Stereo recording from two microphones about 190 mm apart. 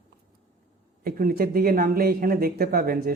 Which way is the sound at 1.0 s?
50° right (ahead or behind).